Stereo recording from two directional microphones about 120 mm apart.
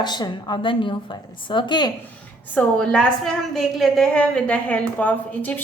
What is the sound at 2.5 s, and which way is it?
A woman's voice, 5° left (ahead or behind).